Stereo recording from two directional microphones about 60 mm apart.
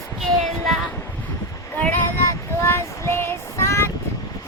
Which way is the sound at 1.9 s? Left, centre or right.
Left.